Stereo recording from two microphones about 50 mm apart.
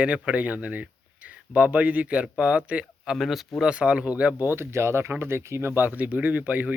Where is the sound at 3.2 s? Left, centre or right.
Centre.